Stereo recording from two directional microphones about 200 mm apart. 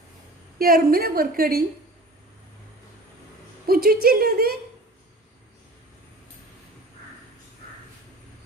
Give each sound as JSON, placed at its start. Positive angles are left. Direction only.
{"t": 0.6, "sound": "a woman's voice", "side_deg": -45}
{"t": 3.7, "sound": "a woman's voice", "side_deg": -50}